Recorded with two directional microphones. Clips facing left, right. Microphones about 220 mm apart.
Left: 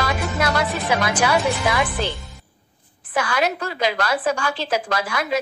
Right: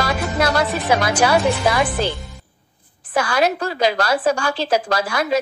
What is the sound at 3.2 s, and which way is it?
A woman's voice, 35° right (ahead or behind).